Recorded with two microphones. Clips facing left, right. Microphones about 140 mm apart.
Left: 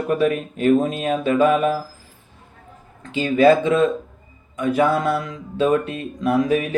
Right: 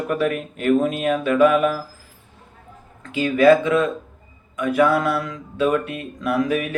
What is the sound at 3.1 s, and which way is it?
Speech, 25° left (ahead or behind).